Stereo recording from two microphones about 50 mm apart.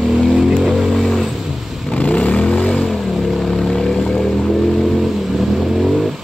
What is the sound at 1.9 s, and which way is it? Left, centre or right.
Vehicle, left.